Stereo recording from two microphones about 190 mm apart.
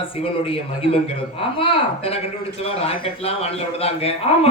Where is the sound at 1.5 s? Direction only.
30° left (ahead or behind).